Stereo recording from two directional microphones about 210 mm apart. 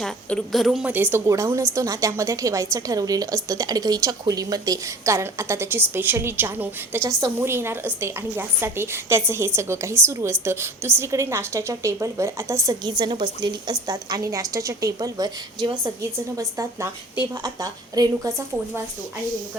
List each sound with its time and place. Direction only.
0.0 s a woman's voice: 5° left (ahead or behind); by 18.8 s 15° right (ahead or behind)